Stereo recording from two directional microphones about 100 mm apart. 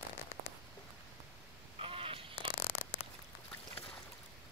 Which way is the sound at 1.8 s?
65° right (ahead or behind).